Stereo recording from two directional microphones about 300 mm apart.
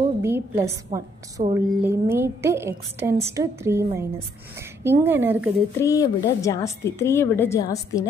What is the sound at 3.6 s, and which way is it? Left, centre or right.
A woman's voice, centre.